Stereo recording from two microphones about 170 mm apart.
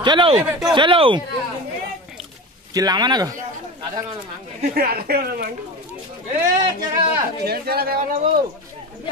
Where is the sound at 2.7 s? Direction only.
25° right (ahead or behind).